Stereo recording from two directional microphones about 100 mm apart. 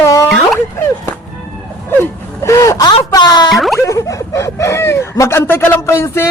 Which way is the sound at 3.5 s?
Centre (ahead or behind).